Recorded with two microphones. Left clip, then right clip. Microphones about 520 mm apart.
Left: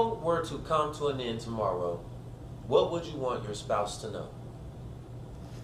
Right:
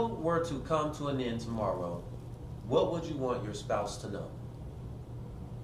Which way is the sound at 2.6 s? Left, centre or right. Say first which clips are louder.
Left 3 dB; centre.